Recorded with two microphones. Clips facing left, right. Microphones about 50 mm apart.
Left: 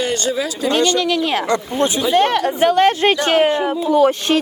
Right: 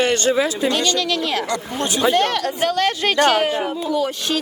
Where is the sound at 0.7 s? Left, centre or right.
Left.